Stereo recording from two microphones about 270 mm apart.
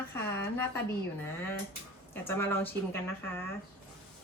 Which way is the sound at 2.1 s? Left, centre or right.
Centre.